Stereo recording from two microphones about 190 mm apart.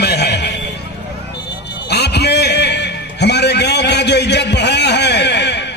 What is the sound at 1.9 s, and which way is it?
Music, 60° left (ahead or behind).